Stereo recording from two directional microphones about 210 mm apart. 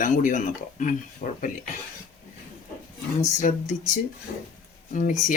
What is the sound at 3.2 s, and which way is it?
Speech, 35° left (ahead or behind).